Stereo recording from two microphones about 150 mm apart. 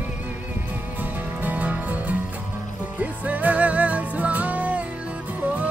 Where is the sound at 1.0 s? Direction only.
10° right (ahead or behind).